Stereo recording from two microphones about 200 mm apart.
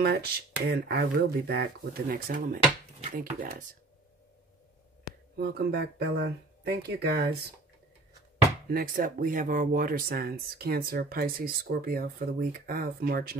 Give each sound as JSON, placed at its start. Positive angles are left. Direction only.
{"t": 0.0, "sound": "speech", "side_deg": -50}
{"t": 5.4, "sound": "speech", "side_deg": -55}
{"t": 8.6, "sound": "speech", "side_deg": -45}